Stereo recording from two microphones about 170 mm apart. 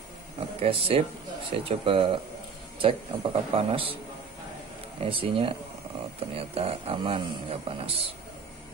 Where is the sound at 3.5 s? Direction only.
35° right (ahead or behind).